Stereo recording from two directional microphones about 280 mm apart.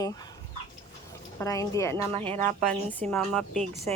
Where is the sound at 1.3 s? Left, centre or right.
Centre.